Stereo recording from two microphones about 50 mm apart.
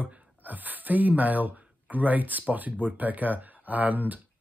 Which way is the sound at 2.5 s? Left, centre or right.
Right.